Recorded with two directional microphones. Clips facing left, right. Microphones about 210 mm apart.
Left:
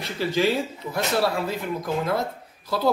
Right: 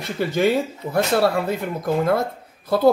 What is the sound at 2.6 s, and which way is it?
Speech, 55° right (ahead or behind).